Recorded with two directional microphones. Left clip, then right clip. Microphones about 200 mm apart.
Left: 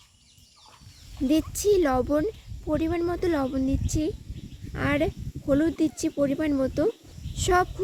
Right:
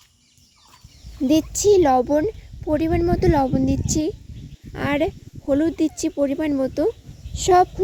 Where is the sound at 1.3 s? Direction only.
20° right (ahead or behind).